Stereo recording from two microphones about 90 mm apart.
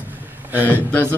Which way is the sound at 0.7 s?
15° left (ahead or behind).